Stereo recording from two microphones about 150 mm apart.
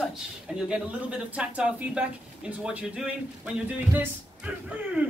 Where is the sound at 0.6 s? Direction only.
5° right (ahead or behind).